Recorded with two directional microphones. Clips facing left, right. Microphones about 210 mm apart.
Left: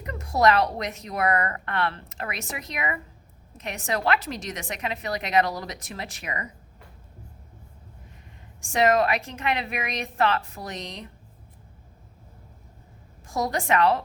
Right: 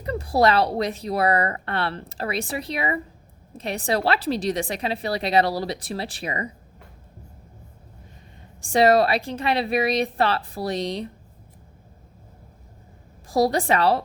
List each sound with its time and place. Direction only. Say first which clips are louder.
0.0 s a woman's voice: right 2 dB; 35° right (ahead or behind)
8.6 s a woman's voice: right 4 dB; 35° right (ahead or behind)
13.2 s a woman's voice: right 6 dB; 35° right (ahead or behind)